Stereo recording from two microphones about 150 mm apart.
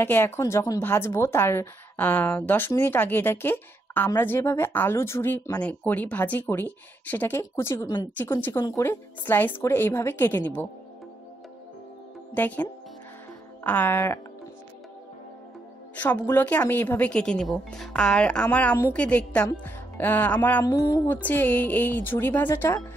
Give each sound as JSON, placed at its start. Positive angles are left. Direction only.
{"t": 0.0, "sound": "a woman's voice", "side_deg": 15}
{"t": 12.4, "sound": "a woman's voice", "side_deg": 10}
{"t": 13.7, "sound": "a woman's voice", "side_deg": 15}
{"t": 16.0, "sound": "a woman's voice", "side_deg": 10}
{"t": 19.6, "sound": "music", "side_deg": 10}
{"t": 20.6, "sound": "speech", "side_deg": 25}
{"t": 21.1, "sound": "a woman's voice", "side_deg": 10}